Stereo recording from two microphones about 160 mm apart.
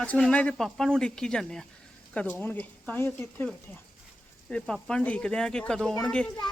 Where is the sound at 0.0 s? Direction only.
5° left (ahead or behind).